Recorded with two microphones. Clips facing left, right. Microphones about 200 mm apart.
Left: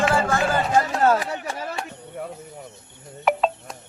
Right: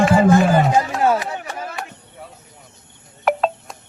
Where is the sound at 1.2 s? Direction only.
35° left (ahead or behind).